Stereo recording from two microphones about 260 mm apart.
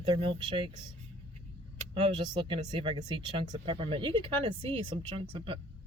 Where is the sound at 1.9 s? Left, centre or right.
Centre.